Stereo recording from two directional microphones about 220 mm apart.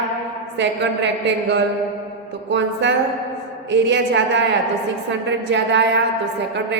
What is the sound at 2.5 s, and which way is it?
Speech, 55° right (ahead or behind).